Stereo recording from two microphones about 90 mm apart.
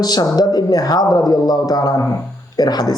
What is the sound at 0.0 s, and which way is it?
Speech, 45° left (ahead or behind).